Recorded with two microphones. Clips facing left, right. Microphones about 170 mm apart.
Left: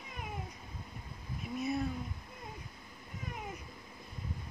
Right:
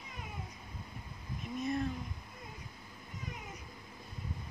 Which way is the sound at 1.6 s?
5° left (ahead or behind).